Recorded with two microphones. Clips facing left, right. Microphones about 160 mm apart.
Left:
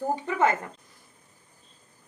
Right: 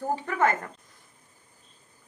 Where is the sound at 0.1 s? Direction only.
20° left (ahead or behind).